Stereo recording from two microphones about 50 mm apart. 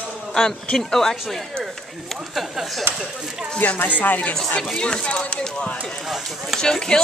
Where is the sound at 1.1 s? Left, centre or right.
Centre.